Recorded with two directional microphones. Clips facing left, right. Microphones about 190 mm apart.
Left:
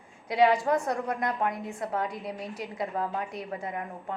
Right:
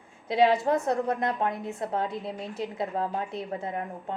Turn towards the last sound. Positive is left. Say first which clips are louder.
# right 2 dB
turn(degrees=-25)  # may be behind; listen again after turning